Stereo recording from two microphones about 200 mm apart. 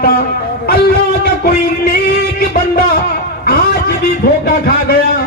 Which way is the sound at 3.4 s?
50° left (ahead or behind).